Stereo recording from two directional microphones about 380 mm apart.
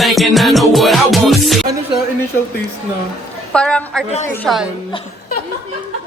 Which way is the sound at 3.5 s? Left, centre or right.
Centre.